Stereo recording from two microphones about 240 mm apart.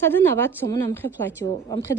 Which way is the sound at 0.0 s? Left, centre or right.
Centre.